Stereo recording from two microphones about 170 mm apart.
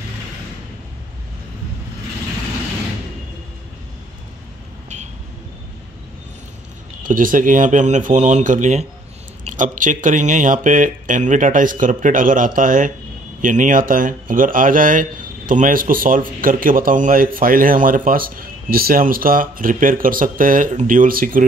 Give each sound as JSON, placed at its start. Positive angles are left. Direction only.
{"t": 7.0, "sound": "speech", "side_deg": -50}